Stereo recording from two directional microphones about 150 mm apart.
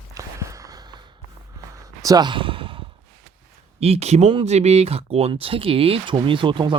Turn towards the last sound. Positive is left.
turn(degrees=-35)  # may be behind; listen again after turning